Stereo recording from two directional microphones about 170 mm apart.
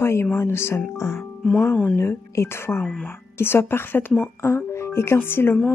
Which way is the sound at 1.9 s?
15° left (ahead or behind).